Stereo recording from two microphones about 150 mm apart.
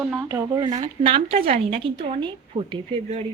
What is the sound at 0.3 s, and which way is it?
Speech, 25° right (ahead or behind).